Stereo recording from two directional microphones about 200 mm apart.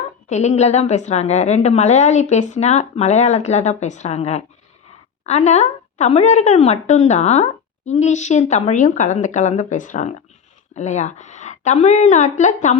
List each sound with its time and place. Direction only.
0.3 s a woman's voice: 35° left (ahead or behind)